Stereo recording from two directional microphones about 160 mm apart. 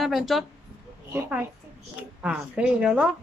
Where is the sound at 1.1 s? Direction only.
15° right (ahead or behind).